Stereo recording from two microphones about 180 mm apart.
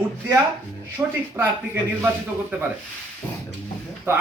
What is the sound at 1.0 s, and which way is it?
Speech, 15° right (ahead or behind).